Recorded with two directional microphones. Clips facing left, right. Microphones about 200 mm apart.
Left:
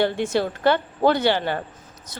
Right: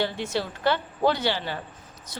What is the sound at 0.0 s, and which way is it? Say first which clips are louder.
A woman's voice: left 6 dB; 50° left (ahead or behind).